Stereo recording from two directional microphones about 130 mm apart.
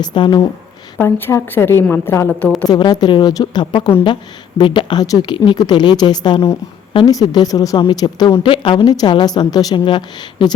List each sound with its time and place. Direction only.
0.0 s a woman's voice: 35° left (ahead or behind)
0.9 s a woman's voice: 15° left (ahead or behind)
2.6 s a woman's voice: 30° left (ahead or behind)